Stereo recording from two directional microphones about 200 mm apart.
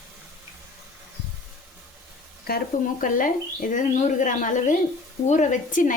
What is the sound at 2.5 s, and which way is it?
Speech, 50° left (ahead or behind).